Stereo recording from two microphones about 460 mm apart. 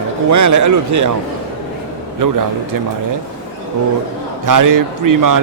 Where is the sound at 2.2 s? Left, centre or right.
Right.